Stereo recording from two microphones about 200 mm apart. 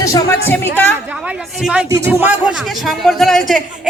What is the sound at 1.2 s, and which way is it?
A woman's voice, 5° right (ahead or behind).